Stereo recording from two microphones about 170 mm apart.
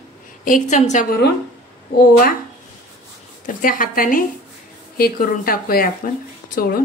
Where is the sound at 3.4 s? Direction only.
55° left (ahead or behind).